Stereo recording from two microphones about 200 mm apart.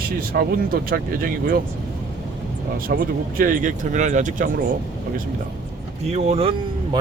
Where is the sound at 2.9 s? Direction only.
50° right (ahead or behind).